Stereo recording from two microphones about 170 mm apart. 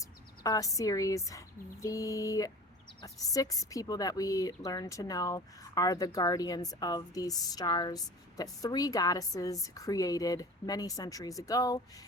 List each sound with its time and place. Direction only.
0.0 s speech: 20° left (ahead or behind)